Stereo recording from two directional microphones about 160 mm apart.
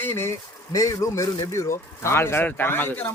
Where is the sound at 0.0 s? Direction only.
15° left (ahead or behind).